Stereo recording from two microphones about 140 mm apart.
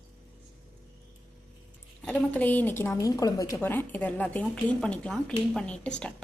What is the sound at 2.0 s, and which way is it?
A woman's voice, 10° left (ahead or behind).